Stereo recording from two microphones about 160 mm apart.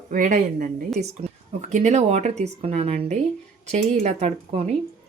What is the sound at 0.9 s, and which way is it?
Speech, 45° right (ahead or behind).